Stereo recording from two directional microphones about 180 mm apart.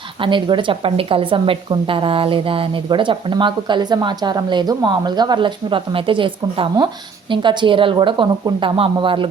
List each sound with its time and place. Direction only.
0.2 s a woman's voice: 25° right (ahead or behind)